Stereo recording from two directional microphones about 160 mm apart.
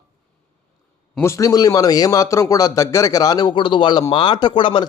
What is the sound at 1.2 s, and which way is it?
A man's voice, 20° left (ahead or behind).